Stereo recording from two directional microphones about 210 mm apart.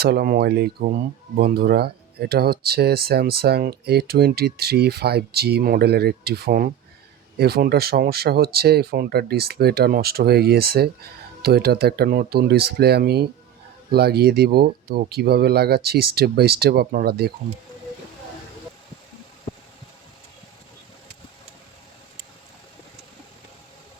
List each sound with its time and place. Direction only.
0.0 s speech: 45° right (ahead or behind)